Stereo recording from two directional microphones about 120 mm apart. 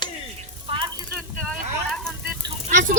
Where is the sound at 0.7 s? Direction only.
50° right (ahead or behind).